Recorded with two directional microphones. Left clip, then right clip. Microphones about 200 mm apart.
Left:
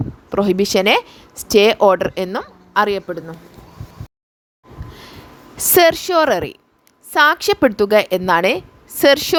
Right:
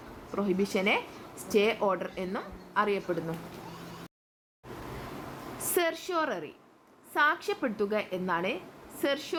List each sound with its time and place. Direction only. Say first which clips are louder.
0.3 s speech: left 14 dB; 55° left (ahead or behind); by 3.3 s 35° left (ahead or behind)
5.7 s a woman's voice: left 17 dB; 50° left (ahead or behind)